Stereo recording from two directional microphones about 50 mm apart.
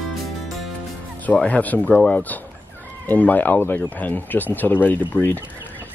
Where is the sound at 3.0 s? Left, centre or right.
Left.